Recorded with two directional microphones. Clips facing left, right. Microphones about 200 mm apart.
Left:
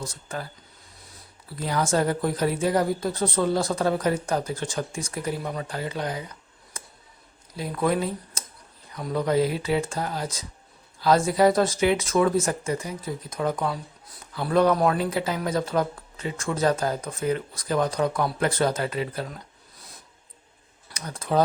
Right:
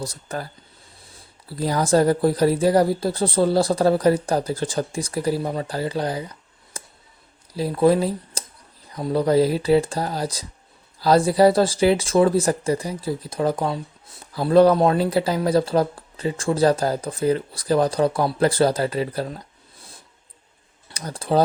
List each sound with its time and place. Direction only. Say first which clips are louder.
0.0 s speech: right 4 dB; 40° right (ahead or behind)
1.5 s speech: right 5 dB; 35° right (ahead or behind)
7.5 s speech: right 7 dB; 30° right (ahead or behind)
20.9 s speech: right 3 dB; 35° right (ahead or behind)